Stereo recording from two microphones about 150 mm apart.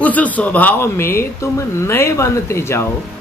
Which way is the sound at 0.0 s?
10° left (ahead or behind).